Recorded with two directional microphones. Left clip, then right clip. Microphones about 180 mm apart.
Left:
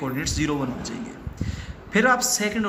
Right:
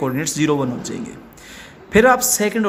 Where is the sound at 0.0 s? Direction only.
55° right (ahead or behind).